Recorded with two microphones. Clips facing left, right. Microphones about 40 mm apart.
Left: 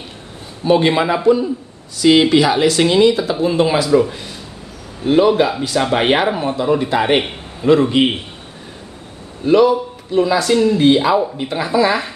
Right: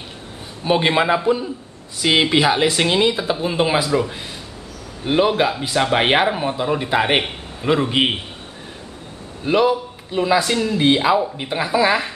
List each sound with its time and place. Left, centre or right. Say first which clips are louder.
0.7 s speech: left 3 dB; centre
5.0 s speech: left 4 dB; centre
9.5 s speech: left 5 dB; centre